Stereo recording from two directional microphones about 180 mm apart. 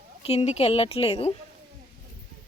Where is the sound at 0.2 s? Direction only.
35° left (ahead or behind).